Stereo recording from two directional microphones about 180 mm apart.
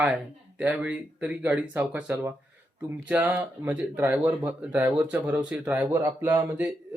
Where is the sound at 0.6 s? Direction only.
10° right (ahead or behind).